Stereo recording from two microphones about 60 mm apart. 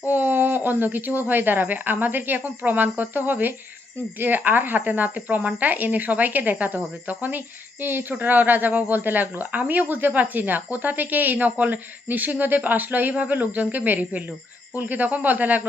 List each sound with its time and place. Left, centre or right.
0.0 s speech: right